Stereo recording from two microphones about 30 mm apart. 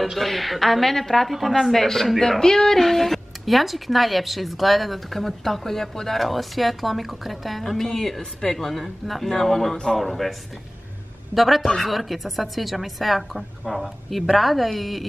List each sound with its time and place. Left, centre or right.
0.0 s speech: centre
2.4 s music: centre
2.8 s speech: centre
8.6 s speech: centre
11.3 s speech: centre